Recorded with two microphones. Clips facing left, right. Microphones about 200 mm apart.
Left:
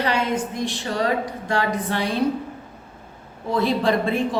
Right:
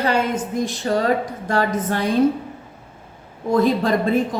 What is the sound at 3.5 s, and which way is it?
Speech, 45° right (ahead or behind).